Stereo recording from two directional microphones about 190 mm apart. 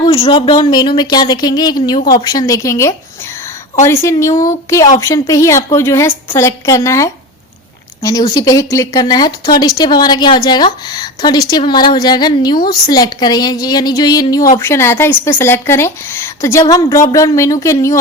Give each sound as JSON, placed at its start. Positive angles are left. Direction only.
{"t": 0.0, "sound": "a woman's voice", "side_deg": 25}
{"t": 2.0, "sound": "a woman's voice", "side_deg": 55}
{"t": 2.3, "sound": "a woman's voice", "side_deg": 20}